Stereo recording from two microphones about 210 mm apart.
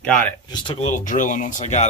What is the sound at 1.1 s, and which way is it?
Speech, 35° left (ahead or behind).